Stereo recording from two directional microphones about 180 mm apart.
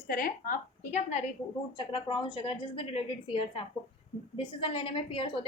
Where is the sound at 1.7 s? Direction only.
25° left (ahead or behind).